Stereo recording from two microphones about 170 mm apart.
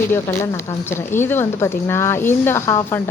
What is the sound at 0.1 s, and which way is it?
Speech, 15° left (ahead or behind).